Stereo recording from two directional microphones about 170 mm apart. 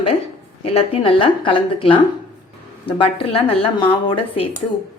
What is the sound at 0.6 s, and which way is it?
Speech, 35° left (ahead or behind).